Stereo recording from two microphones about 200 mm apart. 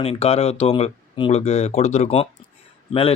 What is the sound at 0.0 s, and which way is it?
Speech, 30° left (ahead or behind).